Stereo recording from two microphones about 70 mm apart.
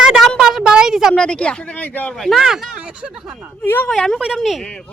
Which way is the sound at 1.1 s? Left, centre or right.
Centre.